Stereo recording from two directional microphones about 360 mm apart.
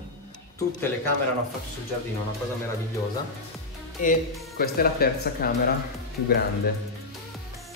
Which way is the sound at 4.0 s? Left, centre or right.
Left.